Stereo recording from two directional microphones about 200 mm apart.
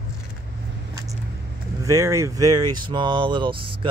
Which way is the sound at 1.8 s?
15° right (ahead or behind).